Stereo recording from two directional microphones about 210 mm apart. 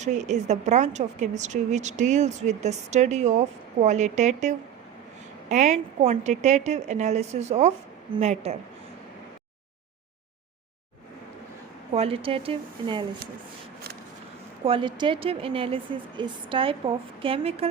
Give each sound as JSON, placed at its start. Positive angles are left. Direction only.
{"t": 0.0, "sound": "a woman's voice", "side_deg": -35}
{"t": 11.9, "sound": "speech", "side_deg": -25}
{"t": 14.6, "sound": "speech", "side_deg": -25}